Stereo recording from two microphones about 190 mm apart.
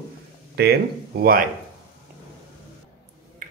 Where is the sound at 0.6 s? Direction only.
55° right (ahead or behind).